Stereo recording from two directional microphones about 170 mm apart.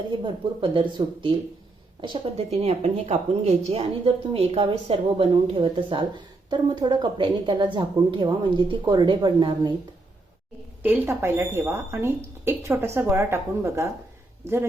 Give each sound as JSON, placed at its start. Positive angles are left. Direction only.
{"t": 0.6, "sound": "speech", "side_deg": -30}
{"t": 2.4, "sound": "a woman's voice", "side_deg": -40}
{"t": 10.8, "sound": "a woman's voice", "side_deg": -10}